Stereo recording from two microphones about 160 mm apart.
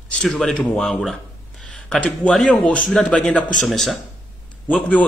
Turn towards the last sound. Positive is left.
turn(degrees=10)  # may be behind; listen again after turning